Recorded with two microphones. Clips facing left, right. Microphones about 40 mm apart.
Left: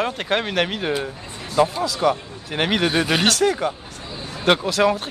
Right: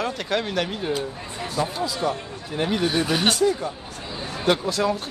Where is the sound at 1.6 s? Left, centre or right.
Left.